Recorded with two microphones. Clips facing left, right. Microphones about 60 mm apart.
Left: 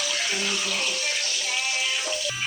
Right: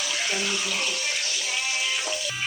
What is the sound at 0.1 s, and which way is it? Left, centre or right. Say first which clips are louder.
Bathtub: right 3 dB; centre.